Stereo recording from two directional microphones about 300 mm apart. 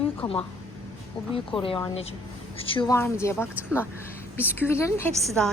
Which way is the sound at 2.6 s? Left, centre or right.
Centre.